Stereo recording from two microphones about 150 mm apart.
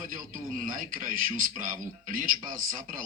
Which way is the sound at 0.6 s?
65° right (ahead or behind).